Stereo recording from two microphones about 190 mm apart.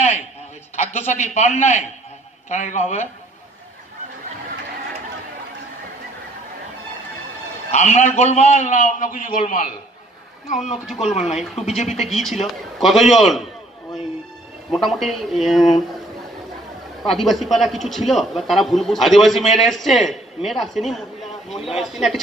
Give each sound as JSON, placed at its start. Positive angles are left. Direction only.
{"t": 0.7, "sound": "a man's voice", "side_deg": 35}
{"t": 7.7, "sound": "a man's voice", "side_deg": 35}
{"t": 10.9, "sound": "a man's voice", "side_deg": 0}
{"t": 11.5, "sound": "a man's voice", "side_deg": 35}
{"t": 11.9, "sound": "a man's voice", "side_deg": 0}
{"t": 14.7, "sound": "a man's voice", "side_deg": 0}
{"t": 17.0, "sound": "a man's voice", "side_deg": 0}